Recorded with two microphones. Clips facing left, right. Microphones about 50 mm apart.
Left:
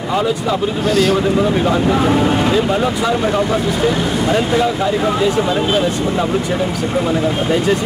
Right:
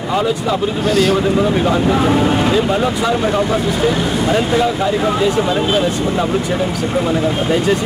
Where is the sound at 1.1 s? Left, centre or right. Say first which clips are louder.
Even; centre.